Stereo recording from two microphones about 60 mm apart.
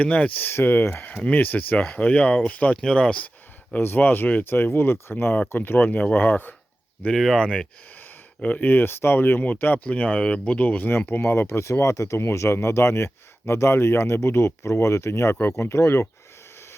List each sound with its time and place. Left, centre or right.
0.0 s speech: left
2.8 s speech: centre
3.8 s speech: left
7.3 s speech: centre
8.4 s speech: left